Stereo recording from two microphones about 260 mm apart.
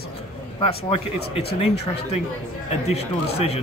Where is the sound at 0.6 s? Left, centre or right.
Left.